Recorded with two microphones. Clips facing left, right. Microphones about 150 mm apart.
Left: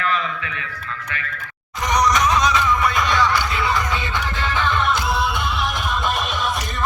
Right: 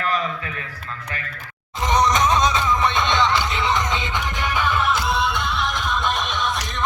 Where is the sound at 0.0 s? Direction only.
40° right (ahead or behind).